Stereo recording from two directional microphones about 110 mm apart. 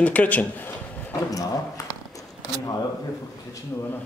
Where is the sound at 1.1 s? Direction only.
30° left (ahead or behind).